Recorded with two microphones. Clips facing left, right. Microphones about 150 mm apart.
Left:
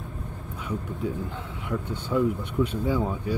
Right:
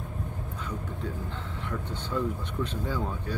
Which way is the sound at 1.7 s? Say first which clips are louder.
Left 6 dB; 10° left (ahead or behind).